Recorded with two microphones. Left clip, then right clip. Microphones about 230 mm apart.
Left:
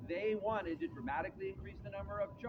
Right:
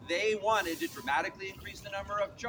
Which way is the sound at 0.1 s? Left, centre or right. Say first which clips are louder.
Right 8 dB; right.